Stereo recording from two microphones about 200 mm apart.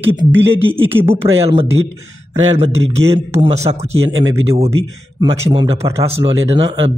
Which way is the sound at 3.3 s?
30° right (ahead or behind).